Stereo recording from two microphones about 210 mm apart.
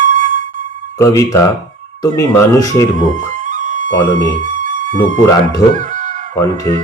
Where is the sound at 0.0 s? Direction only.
40° right (ahead or behind).